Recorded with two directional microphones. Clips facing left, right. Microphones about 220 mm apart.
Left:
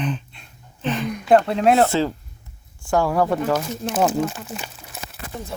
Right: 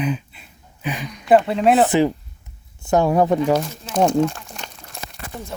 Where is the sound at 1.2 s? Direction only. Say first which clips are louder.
Right 1 dB; 5° right (ahead or behind).